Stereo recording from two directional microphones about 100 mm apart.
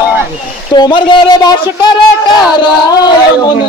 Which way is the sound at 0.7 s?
50° left (ahead or behind).